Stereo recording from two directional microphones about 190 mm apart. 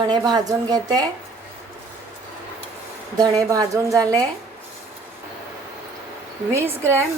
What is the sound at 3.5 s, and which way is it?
Speech, 15° right (ahead or behind).